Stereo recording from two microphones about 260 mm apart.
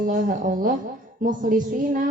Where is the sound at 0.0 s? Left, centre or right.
Right.